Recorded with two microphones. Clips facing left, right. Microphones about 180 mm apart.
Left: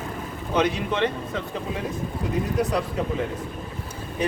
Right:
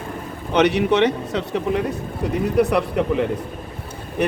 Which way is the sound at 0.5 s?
75° right (ahead or behind).